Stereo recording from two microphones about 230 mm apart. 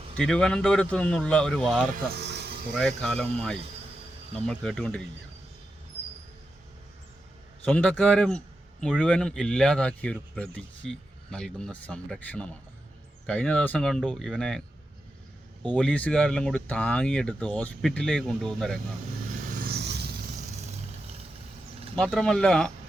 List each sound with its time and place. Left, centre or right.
0.2 s speech: centre
1.9 s a sound: right
2.7 s speech: centre
4.4 s speech: centre
7.7 s speech: centre
15.7 s speech: centre
19.5 s vehicle: right
20.3 s vehicle: right
21.9 s speech: centre